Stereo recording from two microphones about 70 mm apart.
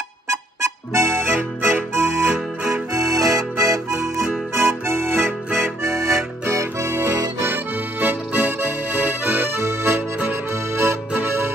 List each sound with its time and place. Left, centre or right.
0.3 s music: right
2.9 s music: right
4.6 s music: right
7.4 s accordion: right